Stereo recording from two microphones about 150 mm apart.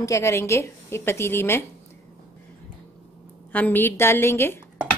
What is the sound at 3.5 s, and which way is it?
A woman's voice, 10° left (ahead or behind).